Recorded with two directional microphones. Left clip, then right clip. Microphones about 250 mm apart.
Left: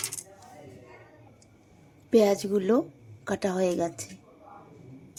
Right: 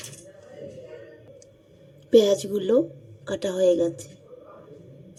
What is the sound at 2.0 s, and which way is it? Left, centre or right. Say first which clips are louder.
A woman's voice: right 4 dB; centre.